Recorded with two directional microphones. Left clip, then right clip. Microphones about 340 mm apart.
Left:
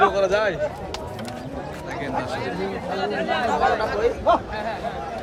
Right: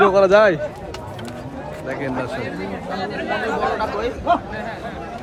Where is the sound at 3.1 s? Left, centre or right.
Left.